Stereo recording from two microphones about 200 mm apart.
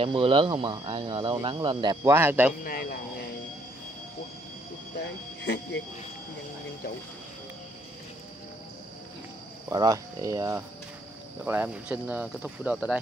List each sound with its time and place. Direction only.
0.0 s speech: 25° right (ahead or behind); by 2.5 s 10° right (ahead or behind)
2.6 s speech: 50° left (ahead or behind)
5.4 s speech: 60° left (ahead or behind)
9.7 s speech: 15° right (ahead or behind)